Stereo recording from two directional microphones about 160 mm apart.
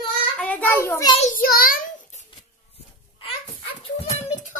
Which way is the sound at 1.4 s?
65° left (ahead or behind).